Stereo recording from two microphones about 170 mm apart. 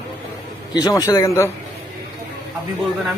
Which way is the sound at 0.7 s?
20° left (ahead or behind).